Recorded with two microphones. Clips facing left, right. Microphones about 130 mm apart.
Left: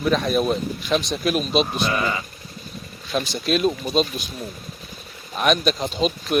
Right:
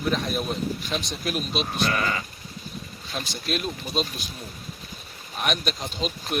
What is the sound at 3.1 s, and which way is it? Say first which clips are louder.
Speech: left 8 dB; 90° left.